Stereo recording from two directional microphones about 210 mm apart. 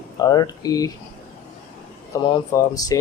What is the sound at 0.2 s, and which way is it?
Speech, 20° left (ahead or behind).